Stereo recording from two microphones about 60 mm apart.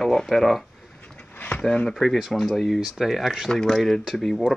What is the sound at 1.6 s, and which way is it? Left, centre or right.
Speech, centre.